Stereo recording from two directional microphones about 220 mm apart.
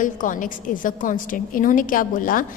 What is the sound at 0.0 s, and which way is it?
A woman's voice, 35° left (ahead or behind).